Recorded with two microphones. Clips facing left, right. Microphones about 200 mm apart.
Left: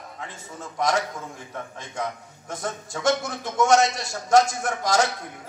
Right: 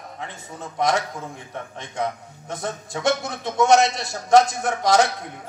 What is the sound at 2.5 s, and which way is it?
A man's voice, 60° right (ahead or behind).